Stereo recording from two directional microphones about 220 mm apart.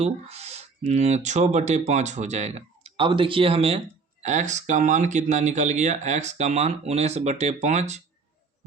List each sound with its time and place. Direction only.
0.0 s speech: 30° right (ahead or behind)